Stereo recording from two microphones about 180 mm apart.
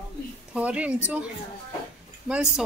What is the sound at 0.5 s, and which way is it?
Speech, 5° right (ahead or behind).